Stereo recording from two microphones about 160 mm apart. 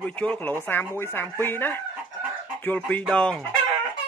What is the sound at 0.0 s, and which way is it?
Speech, 10° left (ahead or behind).